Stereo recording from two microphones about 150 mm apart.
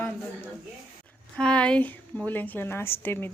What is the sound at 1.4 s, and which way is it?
A woman's voice, 5° left (ahead or behind).